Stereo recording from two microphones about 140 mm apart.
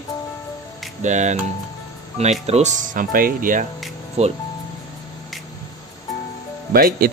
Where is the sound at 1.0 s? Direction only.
60° right (ahead or behind).